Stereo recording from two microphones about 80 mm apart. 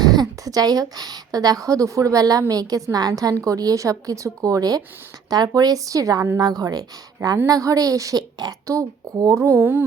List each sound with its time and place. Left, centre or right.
0.0 s a woman's voice: right
8.6 s speech: right